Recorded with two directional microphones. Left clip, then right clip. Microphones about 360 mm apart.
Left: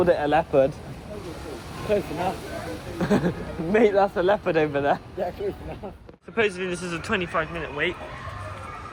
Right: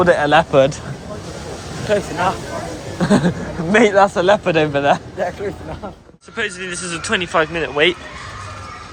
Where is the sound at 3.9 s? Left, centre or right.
Right.